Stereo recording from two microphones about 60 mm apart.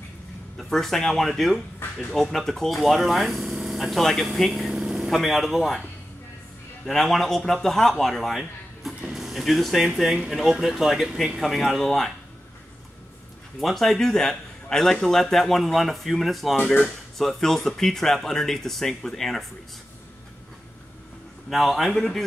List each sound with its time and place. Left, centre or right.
0.6 s a man's voice: centre
1.8 s a sound: left
2.1 s a man's voice: centre
6.9 s a man's voice: centre
9.1 s a sound: centre
9.9 s a man's voice: centre
13.6 s a man's voice: centre
16.5 s speech: left
16.8 s a man's voice: centre
21.5 s a man's voice: centre